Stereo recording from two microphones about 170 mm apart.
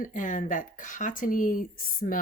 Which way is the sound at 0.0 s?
50° left (ahead or behind).